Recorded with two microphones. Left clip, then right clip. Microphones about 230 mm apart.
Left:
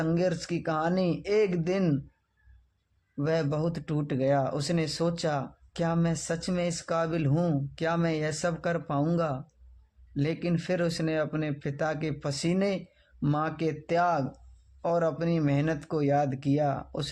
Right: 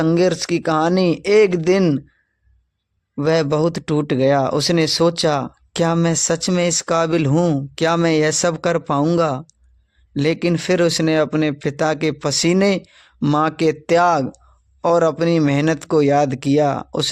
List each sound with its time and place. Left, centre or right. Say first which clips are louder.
0.0 s speech: right 12 dB; right
3.2 s speech: right 12 dB; right